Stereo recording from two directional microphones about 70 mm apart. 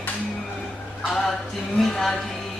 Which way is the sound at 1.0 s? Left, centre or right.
Centre.